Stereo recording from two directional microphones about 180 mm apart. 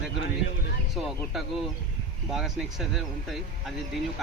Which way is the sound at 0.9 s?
Centre (ahead or behind).